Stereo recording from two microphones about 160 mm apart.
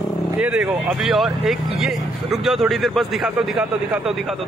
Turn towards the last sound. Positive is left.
turn(degrees=0)  # may be behind; listen again after turning